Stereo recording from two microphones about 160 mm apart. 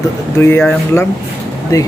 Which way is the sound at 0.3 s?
15° left (ahead or behind).